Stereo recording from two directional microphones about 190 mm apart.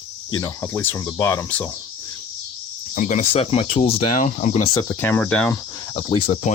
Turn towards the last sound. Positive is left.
turn(degrees=30)  # may be behind; listen again after turning